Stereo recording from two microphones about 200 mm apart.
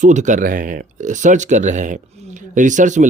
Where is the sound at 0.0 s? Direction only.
40° right (ahead or behind).